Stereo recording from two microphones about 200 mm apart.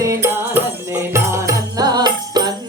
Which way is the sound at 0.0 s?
15° right (ahead or behind).